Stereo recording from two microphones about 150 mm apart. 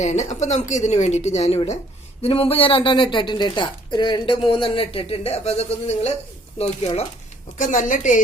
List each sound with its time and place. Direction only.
0.0 s a woman's voice: 50° left (ahead or behind)
7.6 s a woman's voice: 60° left (ahead or behind)